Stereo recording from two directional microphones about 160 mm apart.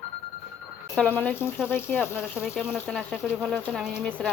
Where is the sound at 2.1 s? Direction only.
5° right (ahead or behind).